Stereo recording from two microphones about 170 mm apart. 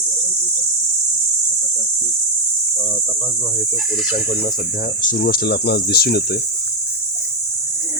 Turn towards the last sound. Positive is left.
turn(degrees=65)  # may be behind; listen again after turning